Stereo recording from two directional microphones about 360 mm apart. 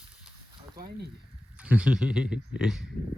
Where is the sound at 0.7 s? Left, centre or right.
Right.